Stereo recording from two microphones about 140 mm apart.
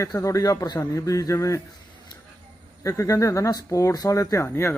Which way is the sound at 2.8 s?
20° left (ahead or behind).